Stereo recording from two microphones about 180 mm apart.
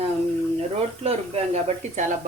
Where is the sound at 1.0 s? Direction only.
35° right (ahead or behind).